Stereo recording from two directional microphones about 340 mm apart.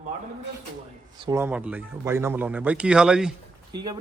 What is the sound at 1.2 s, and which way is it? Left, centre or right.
Speech, centre.